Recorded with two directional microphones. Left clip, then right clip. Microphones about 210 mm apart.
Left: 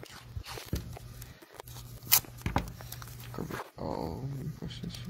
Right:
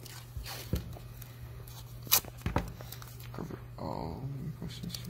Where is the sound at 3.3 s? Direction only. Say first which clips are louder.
Left 6 dB; 40° left (ahead or behind).